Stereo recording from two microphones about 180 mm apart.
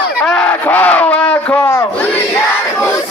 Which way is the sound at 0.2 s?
5° left (ahead or behind).